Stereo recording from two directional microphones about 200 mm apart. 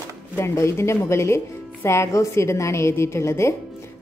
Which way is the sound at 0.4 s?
15° left (ahead or behind).